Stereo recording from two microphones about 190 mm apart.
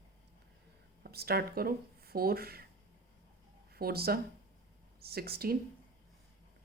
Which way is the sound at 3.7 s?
55° right (ahead or behind).